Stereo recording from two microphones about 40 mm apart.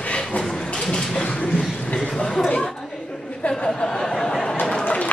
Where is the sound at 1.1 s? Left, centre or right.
Left.